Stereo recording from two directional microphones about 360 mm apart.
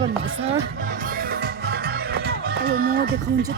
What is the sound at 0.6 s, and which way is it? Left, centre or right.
Music, right.